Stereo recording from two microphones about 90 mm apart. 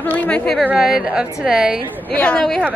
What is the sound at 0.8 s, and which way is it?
A woman's voice, 5° right (ahead or behind).